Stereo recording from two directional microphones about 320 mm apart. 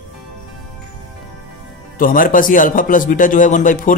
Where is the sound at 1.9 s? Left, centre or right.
Left.